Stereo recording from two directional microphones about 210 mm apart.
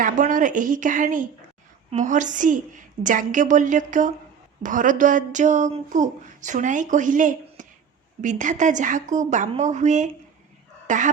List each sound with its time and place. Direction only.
0.0 s speech: 40° right (ahead or behind)